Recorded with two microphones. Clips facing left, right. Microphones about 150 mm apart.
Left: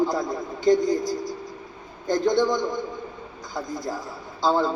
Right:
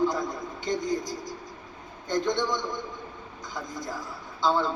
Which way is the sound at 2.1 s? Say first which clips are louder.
Left 6 dB; 35° left (ahead or behind).